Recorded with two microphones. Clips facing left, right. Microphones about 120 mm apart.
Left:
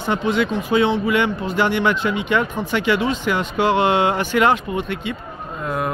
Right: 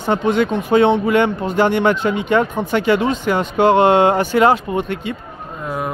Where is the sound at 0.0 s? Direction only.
45° right (ahead or behind).